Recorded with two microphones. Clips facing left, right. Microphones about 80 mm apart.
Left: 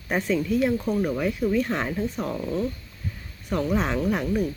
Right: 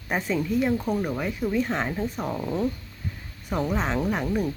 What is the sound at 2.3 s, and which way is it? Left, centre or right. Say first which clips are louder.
Speech: right 2 dB; right.